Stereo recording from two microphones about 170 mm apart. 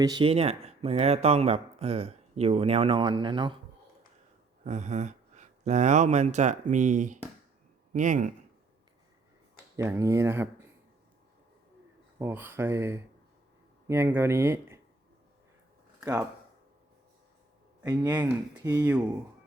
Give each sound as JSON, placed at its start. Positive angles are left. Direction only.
{"t": 0.0, "sound": "speech", "side_deg": -25}
{"t": 4.6, "sound": "speech", "side_deg": -45}
{"t": 9.7, "sound": "speech", "side_deg": -15}
{"t": 12.2, "sound": "speech", "side_deg": -15}
{"t": 17.8, "sound": "speech", "side_deg": -20}